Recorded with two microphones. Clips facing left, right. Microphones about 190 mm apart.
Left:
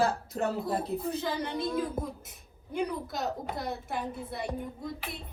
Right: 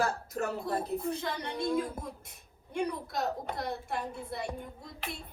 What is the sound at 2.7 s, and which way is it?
A woman's voice, centre (ahead or behind).